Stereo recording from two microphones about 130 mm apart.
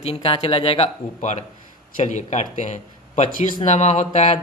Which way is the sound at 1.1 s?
70° left (ahead or behind).